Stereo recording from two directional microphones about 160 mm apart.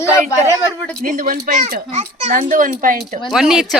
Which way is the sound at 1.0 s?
60° right (ahead or behind).